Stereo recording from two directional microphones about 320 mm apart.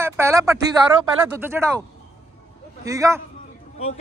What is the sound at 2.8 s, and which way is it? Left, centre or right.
Speech, centre.